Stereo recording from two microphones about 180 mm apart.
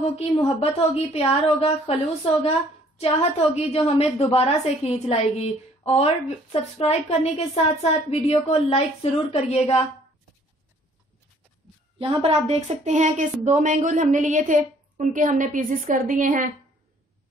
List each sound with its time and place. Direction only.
0.0 s a woman's voice: 35° left (ahead or behind)
12.0 s speech: 30° right (ahead or behind); by 16.5 s 45° right (ahead or behind)